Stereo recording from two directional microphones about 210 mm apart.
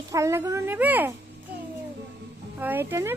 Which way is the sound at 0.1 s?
15° right (ahead or behind).